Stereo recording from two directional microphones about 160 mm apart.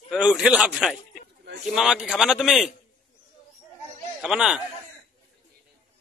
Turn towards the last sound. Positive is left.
turn(degrees=-5)  # may be behind; listen again after turning